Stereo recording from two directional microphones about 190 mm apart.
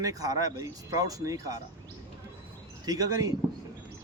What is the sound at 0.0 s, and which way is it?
Speech, 20° right (ahead or behind).